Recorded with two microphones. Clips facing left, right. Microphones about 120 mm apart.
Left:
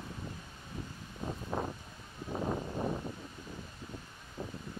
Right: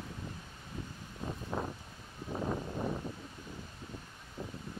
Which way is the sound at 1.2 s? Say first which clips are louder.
Left 1 dB; 15° left (ahead or behind).